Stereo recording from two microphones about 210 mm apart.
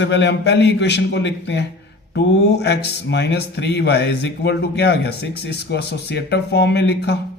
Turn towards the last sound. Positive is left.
turn(degrees=50)  # may be behind; listen again after turning